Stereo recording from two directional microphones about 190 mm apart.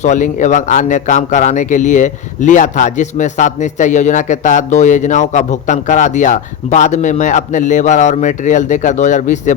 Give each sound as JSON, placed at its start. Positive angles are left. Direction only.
{"t": 0.0, "sound": "a man's voice", "side_deg": 40}